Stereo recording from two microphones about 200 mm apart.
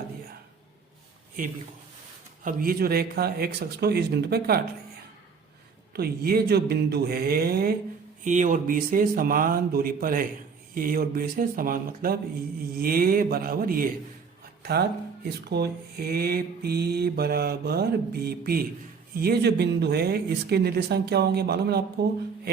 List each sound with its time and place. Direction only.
2.4 s speech: 45° right (ahead or behind)
5.9 s speech: 50° right (ahead or behind)
8.2 s speech: 40° right (ahead or behind)